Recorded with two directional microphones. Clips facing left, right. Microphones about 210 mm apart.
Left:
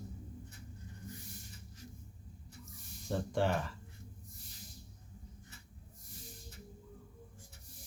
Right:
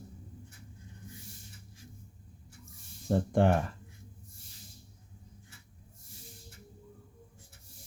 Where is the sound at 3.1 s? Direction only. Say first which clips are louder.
Right 7 dB; 55° right (ahead or behind).